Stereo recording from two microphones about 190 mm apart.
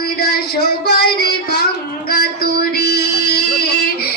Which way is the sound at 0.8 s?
55° left (ahead or behind).